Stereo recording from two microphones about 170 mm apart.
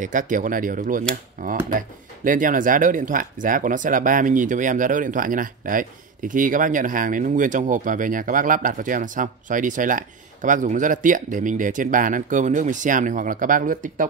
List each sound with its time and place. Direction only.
0.0 s speech: 50° right (ahead or behind)